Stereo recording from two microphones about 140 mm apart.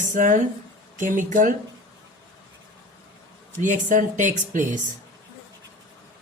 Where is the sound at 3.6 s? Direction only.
65° right (ahead or behind).